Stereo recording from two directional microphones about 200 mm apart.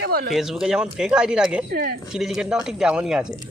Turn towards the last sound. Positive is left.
turn(degrees=-5)  # may be behind; listen again after turning